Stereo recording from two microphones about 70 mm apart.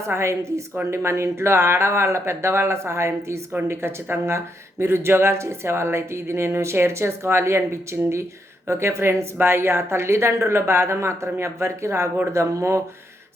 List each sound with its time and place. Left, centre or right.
0.0 s speech: right